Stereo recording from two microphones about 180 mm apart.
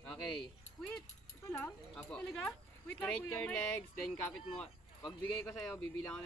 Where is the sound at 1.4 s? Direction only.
10° left (ahead or behind).